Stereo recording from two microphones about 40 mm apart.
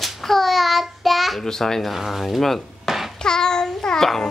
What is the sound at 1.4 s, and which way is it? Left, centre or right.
Speech, centre.